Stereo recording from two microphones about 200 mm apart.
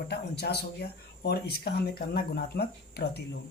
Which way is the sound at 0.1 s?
55° left (ahead or behind).